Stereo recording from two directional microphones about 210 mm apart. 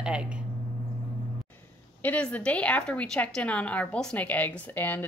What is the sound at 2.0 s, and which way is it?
Speech, 5° left (ahead or behind).